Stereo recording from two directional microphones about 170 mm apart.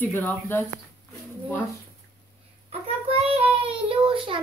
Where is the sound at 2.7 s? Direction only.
35° right (ahead or behind).